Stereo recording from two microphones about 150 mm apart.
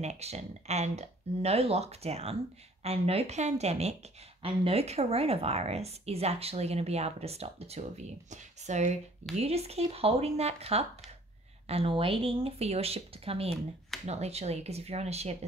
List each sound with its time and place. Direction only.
0.0 s speech: 45° right (ahead or behind)